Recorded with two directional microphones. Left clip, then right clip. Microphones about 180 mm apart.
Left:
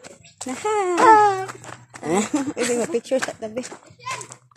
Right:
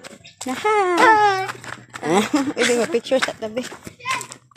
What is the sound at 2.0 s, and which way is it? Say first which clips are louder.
Speech: right 4 dB; 25° right (ahead or behind).